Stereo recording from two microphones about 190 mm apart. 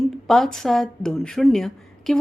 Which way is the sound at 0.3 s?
Centre (ahead or behind).